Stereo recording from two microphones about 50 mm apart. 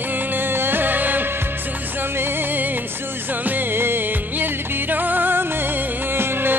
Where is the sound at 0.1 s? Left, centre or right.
Right.